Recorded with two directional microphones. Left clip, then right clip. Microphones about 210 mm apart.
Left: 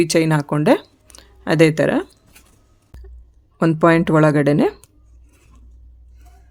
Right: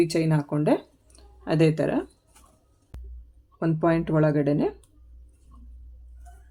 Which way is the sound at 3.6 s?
55° left (ahead or behind).